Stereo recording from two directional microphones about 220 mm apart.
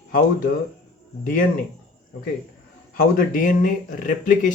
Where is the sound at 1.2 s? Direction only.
40° left (ahead or behind).